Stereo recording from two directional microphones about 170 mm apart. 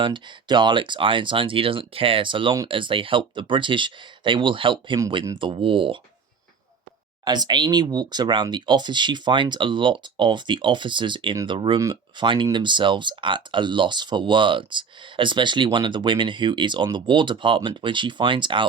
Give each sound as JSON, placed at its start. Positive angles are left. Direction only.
{"t": 0.0, "sound": "speech", "side_deg": -30}
{"t": 5.4, "sound": "speech", "side_deg": -30}
{"t": 7.3, "sound": "speech", "side_deg": -25}